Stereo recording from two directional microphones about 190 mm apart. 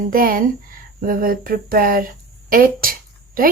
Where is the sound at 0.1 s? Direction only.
50° right (ahead or behind).